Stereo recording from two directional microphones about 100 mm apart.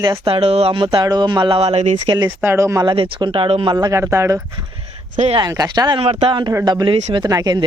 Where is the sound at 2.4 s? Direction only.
25° right (ahead or behind).